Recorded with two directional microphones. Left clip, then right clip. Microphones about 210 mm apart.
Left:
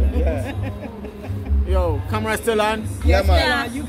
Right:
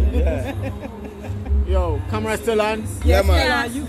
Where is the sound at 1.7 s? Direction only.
25° left (ahead or behind).